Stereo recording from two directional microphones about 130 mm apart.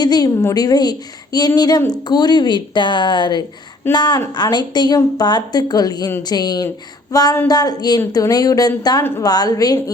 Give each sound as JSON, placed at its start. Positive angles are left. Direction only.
{"t": 0.0, "sound": "a woman's voice", "side_deg": 30}